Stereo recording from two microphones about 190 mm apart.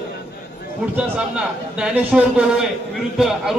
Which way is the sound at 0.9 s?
5° right (ahead or behind).